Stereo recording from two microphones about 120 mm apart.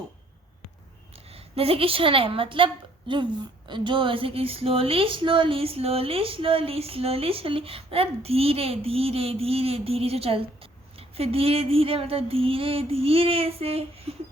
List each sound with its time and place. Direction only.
1.1 s a woman's voice: 55° right (ahead or behind)